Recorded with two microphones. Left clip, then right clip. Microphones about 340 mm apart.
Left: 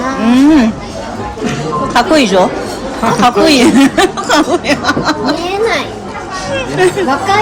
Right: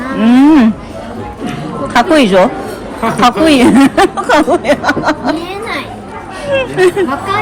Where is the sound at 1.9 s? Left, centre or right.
Right.